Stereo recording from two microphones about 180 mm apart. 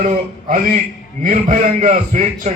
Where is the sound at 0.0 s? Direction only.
45° right (ahead or behind).